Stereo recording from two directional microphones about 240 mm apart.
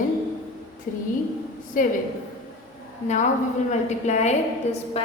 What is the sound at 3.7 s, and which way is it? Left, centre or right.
A woman's voice, left.